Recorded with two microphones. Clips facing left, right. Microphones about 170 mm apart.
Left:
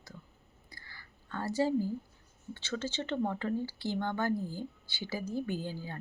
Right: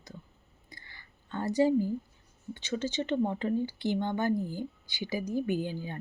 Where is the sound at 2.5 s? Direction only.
15° right (ahead or behind).